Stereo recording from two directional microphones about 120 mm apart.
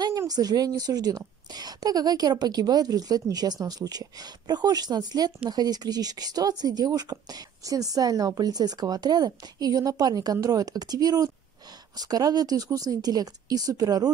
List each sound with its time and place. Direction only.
0.3 s speech: 35° right (ahead or behind)